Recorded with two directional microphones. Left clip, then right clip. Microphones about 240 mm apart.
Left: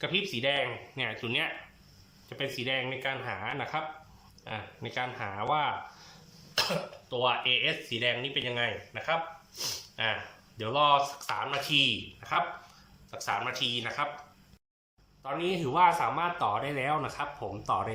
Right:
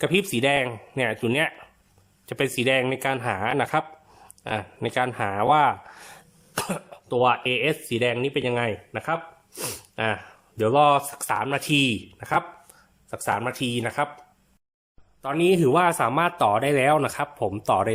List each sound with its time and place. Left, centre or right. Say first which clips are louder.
0.0 s speech: right 7 dB; right
15.2 s speech: right 11 dB; right